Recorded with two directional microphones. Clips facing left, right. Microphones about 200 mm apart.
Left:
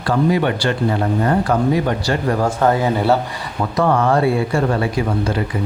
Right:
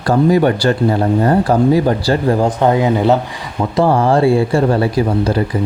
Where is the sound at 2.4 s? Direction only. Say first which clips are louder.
Right 3 dB; 20° right (ahead or behind).